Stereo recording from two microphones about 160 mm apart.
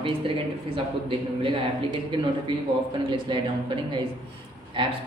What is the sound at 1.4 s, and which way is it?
A woman's voice, 30° right (ahead or behind).